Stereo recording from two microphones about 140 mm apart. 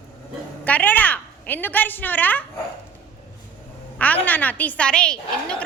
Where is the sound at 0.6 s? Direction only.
10° left (ahead or behind).